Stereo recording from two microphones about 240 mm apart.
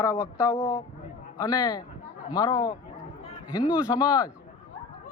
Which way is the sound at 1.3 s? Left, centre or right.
Centre.